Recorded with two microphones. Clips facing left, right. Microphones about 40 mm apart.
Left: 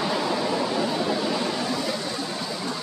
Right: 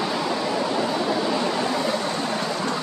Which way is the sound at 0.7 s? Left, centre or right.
Centre.